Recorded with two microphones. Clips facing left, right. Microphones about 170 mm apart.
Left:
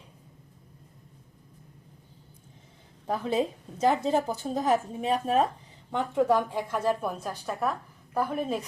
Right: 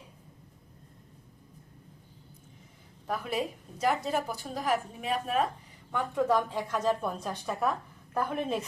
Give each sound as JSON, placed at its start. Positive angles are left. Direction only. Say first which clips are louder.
{"t": 3.1, "sound": "a woman's voice", "louder": "left 5 dB", "side_deg": 25}